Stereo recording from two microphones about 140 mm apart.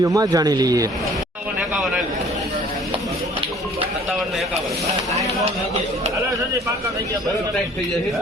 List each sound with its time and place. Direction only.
0.0 s speech: 25° right (ahead or behind)